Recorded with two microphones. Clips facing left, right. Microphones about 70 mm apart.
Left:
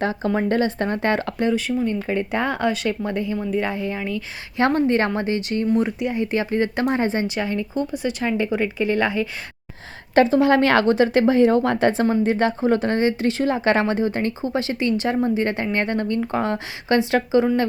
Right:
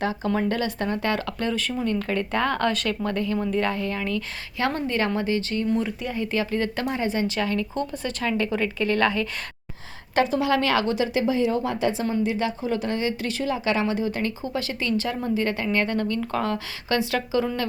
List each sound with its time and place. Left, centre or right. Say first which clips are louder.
0.0 s a woman's voice: left 3 dB; left
1.8 s speech: left 2 dB; centre
4.5 s a woman's voice: left 7 dB; left
6.0 s a woman's voice: left 4 dB; centre
7.3 s speech: left 1 dB; centre
10.2 s a woman's voice: left 6 dB; left
13.4 s a woman's voice: left 4 dB; left